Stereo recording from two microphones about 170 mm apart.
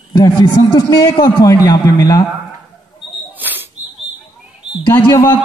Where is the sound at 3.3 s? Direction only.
10° right (ahead or behind).